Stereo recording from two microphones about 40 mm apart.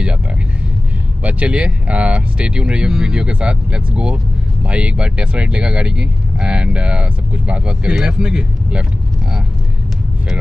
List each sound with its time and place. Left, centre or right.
1.2 s speech: right